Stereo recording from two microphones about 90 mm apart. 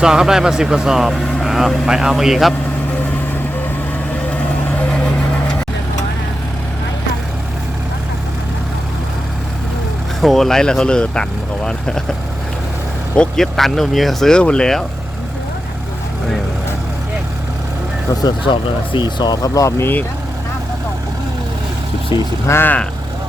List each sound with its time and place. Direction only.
0.0 s speech: 5° right (ahead or behind)
4.9 s vehicle: 10° left (ahead or behind)
10.2 s speech: centre (ahead or behind)
13.1 s speech: 5° left (ahead or behind)
18.9 s speech: 55° left (ahead or behind)
19.8 s speech: 20° left (ahead or behind)
22.1 s speech: 55° left (ahead or behind)
22.4 s speech: 25° left (ahead or behind)